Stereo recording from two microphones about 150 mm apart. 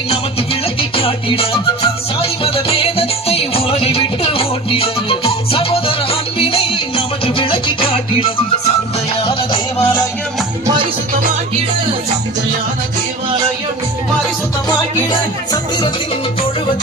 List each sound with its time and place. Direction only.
0.8 s music: 40° left (ahead or behind)